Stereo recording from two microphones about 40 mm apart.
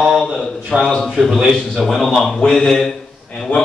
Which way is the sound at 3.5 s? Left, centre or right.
Left.